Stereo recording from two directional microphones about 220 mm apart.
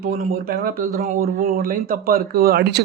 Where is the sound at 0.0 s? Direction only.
40° right (ahead or behind).